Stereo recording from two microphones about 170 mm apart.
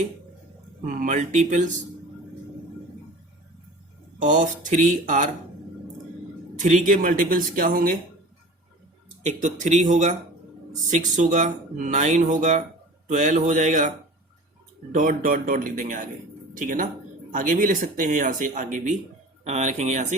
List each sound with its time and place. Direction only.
0.9 s speech: 50° right (ahead or behind)
4.2 s speech: 50° right (ahead or behind)
6.6 s speech: 50° right (ahead or behind)
9.2 s speech: 45° right (ahead or behind)
14.9 s speech: 50° right (ahead or behind)